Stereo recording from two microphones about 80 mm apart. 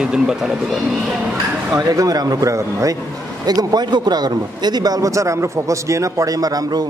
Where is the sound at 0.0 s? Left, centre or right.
Centre.